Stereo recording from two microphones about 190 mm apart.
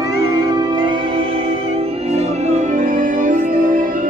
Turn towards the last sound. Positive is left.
turn(degrees=-45)  # may be behind; listen again after turning